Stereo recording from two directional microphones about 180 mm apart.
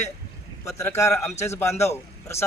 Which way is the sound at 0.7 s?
15° left (ahead or behind).